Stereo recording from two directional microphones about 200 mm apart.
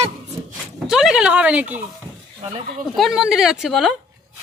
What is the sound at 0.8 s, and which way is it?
Speech, 5° right (ahead or behind).